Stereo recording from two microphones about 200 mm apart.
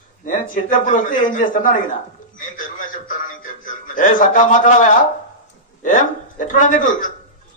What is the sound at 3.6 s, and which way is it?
A man's voice, 40° left (ahead or behind).